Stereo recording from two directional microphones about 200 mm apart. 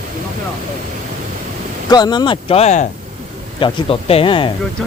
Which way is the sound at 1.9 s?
20° left (ahead or behind).